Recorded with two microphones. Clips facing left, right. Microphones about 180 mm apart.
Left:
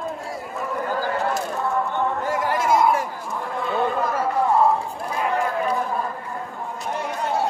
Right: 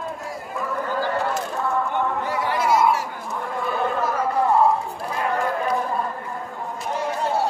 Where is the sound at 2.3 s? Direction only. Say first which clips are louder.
Left 1 dB; 45° left (ahead or behind).